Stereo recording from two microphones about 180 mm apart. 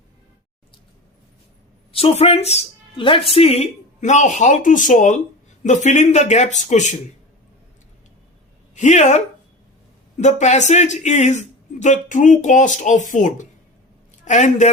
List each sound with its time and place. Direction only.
1.9 s speech: 35° left (ahead or behind)
8.7 s speech: 40° left (ahead or behind)